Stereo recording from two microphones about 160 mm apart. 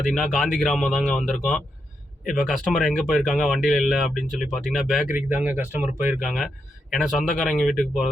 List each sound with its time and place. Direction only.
0.1 s speech: centre (ahead or behind)
5.1 s speech: 10° right (ahead or behind)